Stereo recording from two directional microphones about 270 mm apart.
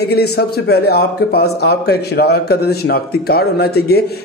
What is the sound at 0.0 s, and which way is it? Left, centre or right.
A man's voice, left.